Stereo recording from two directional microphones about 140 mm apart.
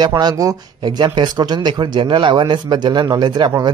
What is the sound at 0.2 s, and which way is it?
Speech, 25° right (ahead or behind).